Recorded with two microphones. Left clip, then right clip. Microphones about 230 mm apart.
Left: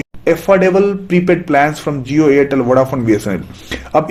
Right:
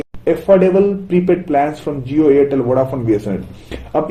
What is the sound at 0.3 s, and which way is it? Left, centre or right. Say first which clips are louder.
A man's voice: left 1 dB; left.